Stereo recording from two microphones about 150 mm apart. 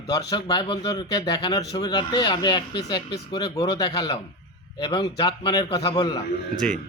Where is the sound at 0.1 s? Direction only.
25° left (ahead or behind).